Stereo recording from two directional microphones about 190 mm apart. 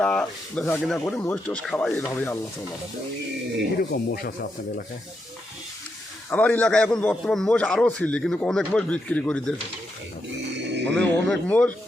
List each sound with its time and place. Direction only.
0.0 s speech: 5° left (ahead or behind)
3.9 s speech: 55° left (ahead or behind)
6.3 s a man's voice: 10° left (ahead or behind)
10.9 s speech: 10° left (ahead or behind)